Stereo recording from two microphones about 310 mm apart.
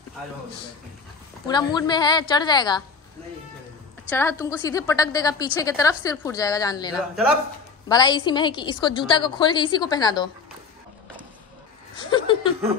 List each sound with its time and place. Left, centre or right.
1.5 s a woman's voice: centre
4.1 s a woman's voice: centre
12.0 s speech: centre